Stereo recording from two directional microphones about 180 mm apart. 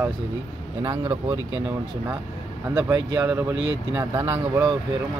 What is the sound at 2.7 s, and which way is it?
Speech, 15° right (ahead or behind).